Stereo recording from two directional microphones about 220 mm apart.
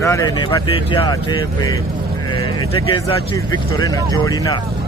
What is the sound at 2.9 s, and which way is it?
Speech, 20° left (ahead or behind).